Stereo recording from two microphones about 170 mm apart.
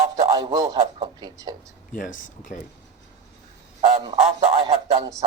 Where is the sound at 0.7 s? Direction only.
30° right (ahead or behind).